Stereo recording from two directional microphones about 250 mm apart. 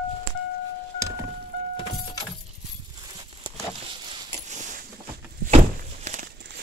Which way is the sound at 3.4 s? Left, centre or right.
Centre.